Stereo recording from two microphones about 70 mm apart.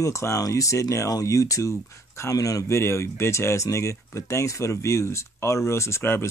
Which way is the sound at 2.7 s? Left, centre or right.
Left.